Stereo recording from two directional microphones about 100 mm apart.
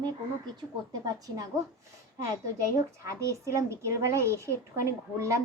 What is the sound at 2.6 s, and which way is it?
A woman's voice, 30° right (ahead or behind).